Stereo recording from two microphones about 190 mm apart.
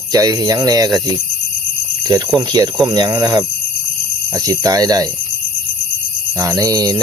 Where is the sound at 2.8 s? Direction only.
20° right (ahead or behind).